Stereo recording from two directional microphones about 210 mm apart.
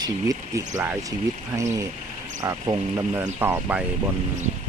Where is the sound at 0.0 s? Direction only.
15° right (ahead or behind).